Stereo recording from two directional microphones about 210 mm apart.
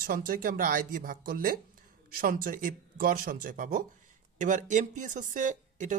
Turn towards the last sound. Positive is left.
turn(degrees=-35)  # may be behind; listen again after turning